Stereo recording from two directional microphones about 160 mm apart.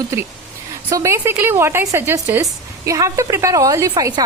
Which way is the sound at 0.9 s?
20° right (ahead or behind).